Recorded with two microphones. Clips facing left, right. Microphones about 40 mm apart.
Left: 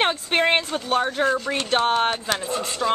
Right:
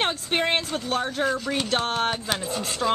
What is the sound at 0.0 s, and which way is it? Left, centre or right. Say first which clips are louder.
Speech: left 4 dB; centre.